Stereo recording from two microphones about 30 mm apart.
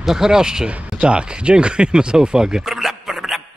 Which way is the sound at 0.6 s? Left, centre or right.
Right.